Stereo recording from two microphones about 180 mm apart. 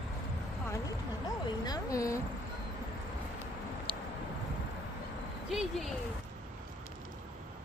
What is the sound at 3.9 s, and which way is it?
Vehicle, 10° left (ahead or behind).